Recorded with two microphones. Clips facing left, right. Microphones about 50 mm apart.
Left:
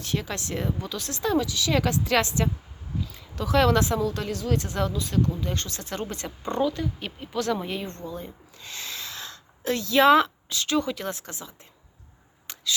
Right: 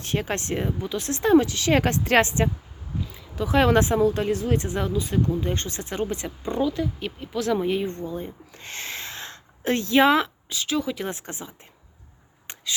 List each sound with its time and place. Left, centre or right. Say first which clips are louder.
0.0 s speech: right 3 dB; right
0.6 s speech: right 3 dB; right
3.1 s speech: right 1 dB; centre
7.9 s speech: right 5 dB; right
8.5 s a sound: right 2 dB; right
10.1 s speech: left 3 dB; centre
11.1 s speech: right 2 dB; right
12.5 s chop: right 2 dB; right